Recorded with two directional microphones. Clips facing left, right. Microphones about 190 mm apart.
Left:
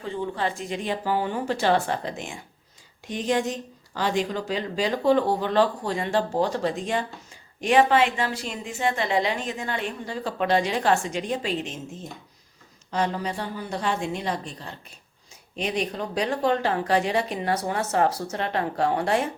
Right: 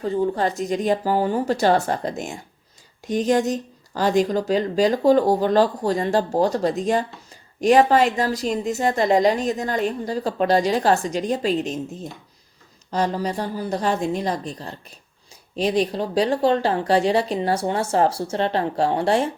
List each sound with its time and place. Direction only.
0.0 s speech: 40° right (ahead or behind)
12.9 s speech: 40° right (ahead or behind)